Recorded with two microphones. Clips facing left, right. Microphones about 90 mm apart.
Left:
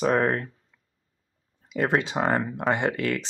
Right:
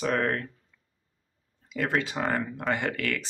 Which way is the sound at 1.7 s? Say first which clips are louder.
Left 4 dB; 25° left (ahead or behind).